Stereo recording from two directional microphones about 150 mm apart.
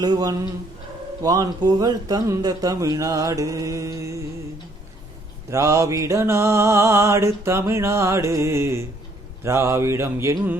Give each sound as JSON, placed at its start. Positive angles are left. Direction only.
{"t": 0.0, "sound": "music", "side_deg": -25}
{"t": 5.5, "sound": "music", "side_deg": -20}
{"t": 9.4, "sound": "mantra", "side_deg": -20}